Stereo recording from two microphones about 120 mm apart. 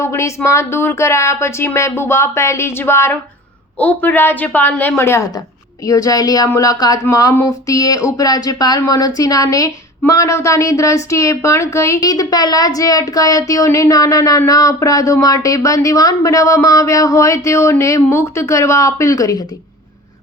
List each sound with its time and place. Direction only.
0.0 s a woman's voice: 25° left (ahead or behind)